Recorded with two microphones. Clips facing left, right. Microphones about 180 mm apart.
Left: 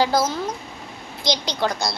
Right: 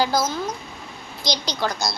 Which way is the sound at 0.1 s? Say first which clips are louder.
Left 2 dB; 30° left (ahead or behind).